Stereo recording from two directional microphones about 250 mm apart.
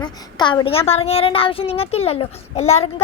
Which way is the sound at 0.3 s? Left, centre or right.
Centre.